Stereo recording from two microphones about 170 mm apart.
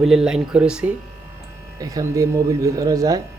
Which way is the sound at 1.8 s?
20° right (ahead or behind).